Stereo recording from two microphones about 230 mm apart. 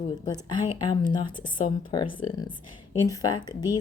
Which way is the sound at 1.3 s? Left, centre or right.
Left.